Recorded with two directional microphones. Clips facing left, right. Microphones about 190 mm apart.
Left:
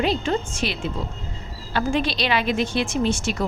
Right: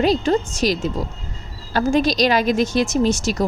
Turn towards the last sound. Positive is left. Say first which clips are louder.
# right 4 dB
turn(degrees=-40)  # may be behind; listen again after turning